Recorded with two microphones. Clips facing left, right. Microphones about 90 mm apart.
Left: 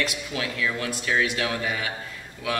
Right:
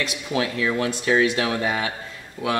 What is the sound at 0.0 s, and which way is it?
Speech, 25° right (ahead or behind).